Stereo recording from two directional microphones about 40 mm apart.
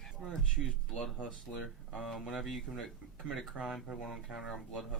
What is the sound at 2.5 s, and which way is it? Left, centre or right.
Speech, centre.